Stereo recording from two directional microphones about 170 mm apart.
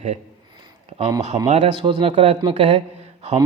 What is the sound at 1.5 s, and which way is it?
A man's voice, 40° right (ahead or behind).